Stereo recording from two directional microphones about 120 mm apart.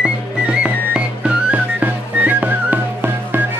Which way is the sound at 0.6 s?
10° right (ahead or behind).